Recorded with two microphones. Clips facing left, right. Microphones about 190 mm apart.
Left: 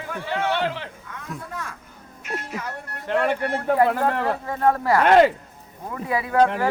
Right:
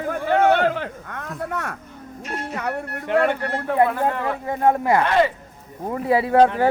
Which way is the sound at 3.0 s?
5° right (ahead or behind).